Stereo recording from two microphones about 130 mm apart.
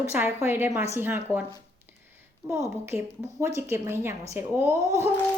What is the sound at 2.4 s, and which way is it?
Speech, 25° right (ahead or behind).